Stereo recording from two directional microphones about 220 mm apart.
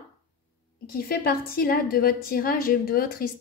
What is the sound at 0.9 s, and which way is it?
A woman's voice, 45° left (ahead or behind).